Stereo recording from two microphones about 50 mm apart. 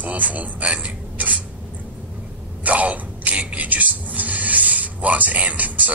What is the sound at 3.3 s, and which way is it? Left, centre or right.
Speech, right.